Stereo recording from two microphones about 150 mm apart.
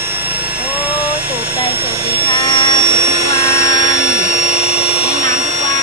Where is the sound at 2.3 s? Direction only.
30° left (ahead or behind).